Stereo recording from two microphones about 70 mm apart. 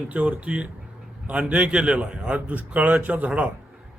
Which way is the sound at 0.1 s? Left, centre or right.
Right.